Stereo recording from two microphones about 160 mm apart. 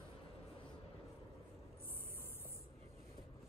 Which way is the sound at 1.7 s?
15° left (ahead or behind).